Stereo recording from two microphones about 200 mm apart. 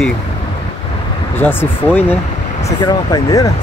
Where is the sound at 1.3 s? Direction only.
10° left (ahead or behind).